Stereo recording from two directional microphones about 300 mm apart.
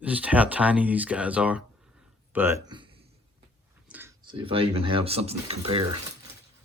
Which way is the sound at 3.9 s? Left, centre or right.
Centre.